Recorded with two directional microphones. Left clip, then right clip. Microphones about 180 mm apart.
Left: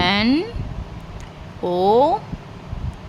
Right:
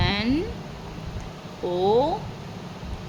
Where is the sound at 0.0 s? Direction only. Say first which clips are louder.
Left 7 dB; 50° left (ahead or behind).